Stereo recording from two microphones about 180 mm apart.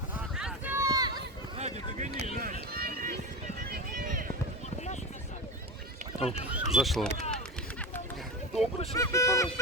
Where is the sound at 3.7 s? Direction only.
50° right (ahead or behind).